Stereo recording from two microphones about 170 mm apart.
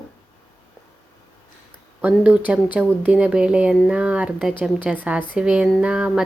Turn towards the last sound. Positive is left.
turn(degrees=-5)  # may be behind; listen again after turning